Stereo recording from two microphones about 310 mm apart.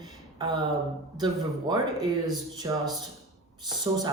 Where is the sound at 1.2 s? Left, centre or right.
Centre.